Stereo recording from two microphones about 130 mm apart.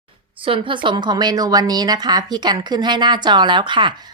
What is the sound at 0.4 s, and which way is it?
A woman's voice, 40° right (ahead or behind).